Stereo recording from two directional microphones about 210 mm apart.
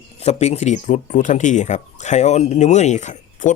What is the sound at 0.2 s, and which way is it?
Speech, 30° left (ahead or behind).